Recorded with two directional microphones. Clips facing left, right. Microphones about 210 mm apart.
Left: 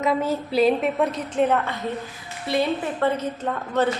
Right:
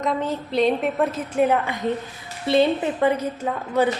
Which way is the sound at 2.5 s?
25° right (ahead or behind).